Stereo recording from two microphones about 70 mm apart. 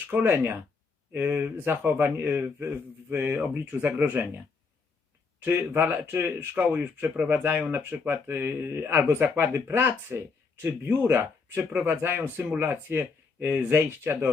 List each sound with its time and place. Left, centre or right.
0.1 s speech: right
5.5 s speech: right